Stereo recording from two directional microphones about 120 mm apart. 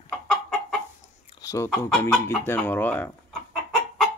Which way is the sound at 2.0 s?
20° left (ahead or behind).